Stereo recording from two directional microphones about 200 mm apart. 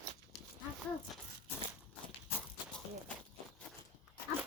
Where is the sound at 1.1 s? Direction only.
Centre (ahead or behind).